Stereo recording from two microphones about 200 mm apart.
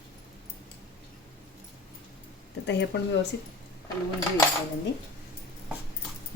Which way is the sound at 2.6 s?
60° left (ahead or behind).